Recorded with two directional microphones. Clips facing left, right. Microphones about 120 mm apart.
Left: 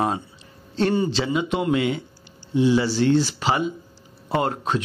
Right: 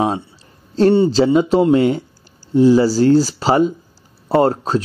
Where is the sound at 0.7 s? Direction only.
35° right (ahead or behind).